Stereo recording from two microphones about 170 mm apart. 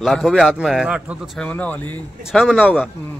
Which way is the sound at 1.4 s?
10° left (ahead or behind).